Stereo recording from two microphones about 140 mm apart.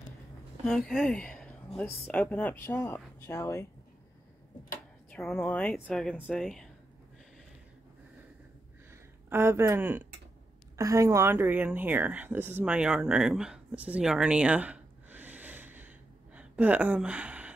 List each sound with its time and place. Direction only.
0.7 s a woman's voice: 5° left (ahead or behind); by 3.6 s 20° left (ahead or behind)
5.1 s speech: 10° left (ahead or behind)
9.3 s a woman's voice: 15° right (ahead or behind)